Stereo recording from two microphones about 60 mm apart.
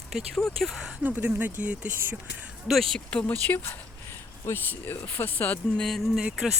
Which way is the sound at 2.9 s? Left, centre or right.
Centre.